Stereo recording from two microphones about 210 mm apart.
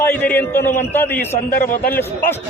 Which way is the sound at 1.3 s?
40° left (ahead or behind).